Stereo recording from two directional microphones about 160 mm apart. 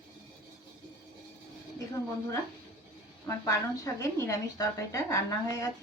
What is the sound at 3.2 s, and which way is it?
A woman's voice, 20° left (ahead or behind).